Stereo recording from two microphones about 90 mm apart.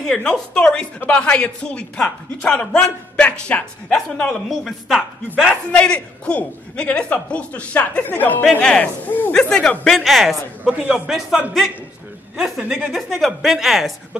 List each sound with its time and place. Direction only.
0.0 s speech: 10° left (ahead or behind)
5.5 s speech: 15° left (ahead or behind)
10.6 s a man's voice: 15° right (ahead or behind)
11.1 s speech: centre (ahead or behind)